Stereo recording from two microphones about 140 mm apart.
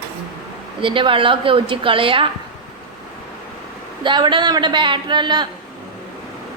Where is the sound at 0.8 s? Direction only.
35° right (ahead or behind).